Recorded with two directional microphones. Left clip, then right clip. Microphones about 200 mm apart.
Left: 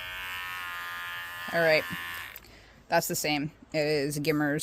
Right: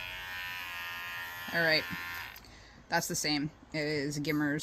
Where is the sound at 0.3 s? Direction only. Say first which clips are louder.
Left 3 dB; 20° left (ahead or behind).